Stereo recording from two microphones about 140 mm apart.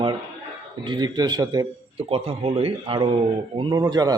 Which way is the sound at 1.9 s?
45° right (ahead or behind).